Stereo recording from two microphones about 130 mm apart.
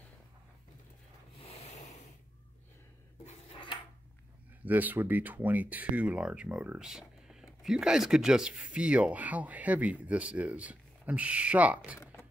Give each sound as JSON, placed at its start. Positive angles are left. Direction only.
{"t": 1.4, "sound": "rub", "side_deg": 55}
{"t": 4.6, "sound": "speech", "side_deg": -15}